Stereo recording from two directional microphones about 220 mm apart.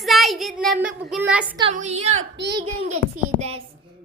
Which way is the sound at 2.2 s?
55° right (ahead or behind).